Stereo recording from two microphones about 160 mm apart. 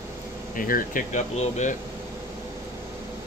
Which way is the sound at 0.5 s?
60° left (ahead or behind).